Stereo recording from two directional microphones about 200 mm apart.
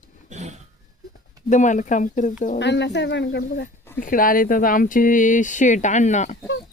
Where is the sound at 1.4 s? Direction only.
40° left (ahead or behind).